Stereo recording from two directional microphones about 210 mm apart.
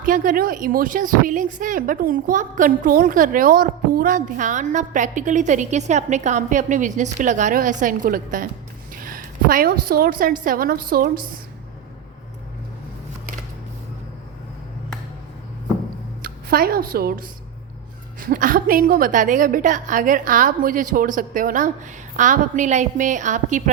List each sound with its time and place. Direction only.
0.0 s a woman's voice: 40° right (ahead or behind)
16.2 s a woman's voice: 45° right (ahead or behind)